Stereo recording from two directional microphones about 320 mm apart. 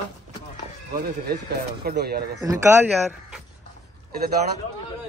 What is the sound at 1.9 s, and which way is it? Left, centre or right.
Speech, right.